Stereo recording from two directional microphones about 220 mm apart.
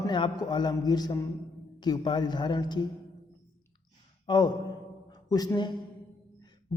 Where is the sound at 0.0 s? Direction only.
20° left (ahead or behind).